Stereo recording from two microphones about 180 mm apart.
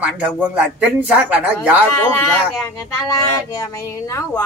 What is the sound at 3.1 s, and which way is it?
Speech, 20° left (ahead or behind).